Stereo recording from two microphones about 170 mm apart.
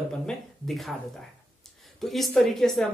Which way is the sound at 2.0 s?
Centre (ahead or behind).